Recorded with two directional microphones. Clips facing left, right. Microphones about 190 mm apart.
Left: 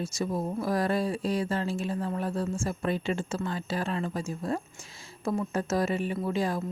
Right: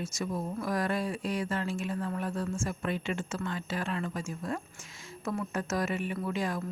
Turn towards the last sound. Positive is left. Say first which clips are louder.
# left 4 dB
turn(degrees=30)  # may be behind; listen again after turning